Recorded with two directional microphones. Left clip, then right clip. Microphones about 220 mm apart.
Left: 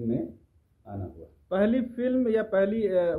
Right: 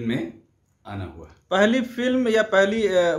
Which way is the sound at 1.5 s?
Centre (ahead or behind).